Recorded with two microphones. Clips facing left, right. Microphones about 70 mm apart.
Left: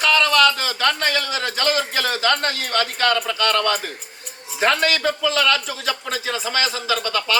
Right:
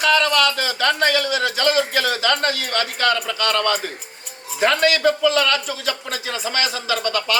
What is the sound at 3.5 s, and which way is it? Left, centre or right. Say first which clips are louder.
Speech: even; right.